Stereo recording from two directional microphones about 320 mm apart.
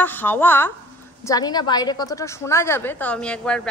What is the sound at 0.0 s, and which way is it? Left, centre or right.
A woman's voice, centre.